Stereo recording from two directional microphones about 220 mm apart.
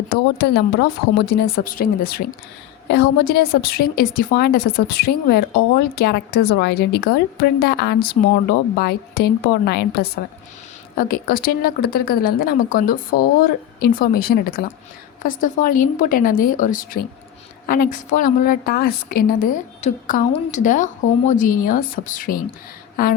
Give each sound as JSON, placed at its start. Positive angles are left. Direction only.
{"t": 0.1, "sound": "a woman's voice", "side_deg": 45}